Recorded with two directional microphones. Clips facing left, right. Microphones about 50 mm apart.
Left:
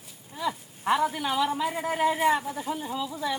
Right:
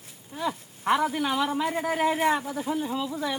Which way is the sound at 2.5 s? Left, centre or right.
Right.